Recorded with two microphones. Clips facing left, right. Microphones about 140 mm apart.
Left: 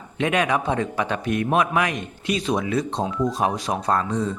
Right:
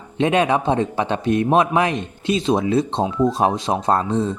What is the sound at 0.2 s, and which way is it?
Speech, 30° right (ahead or behind).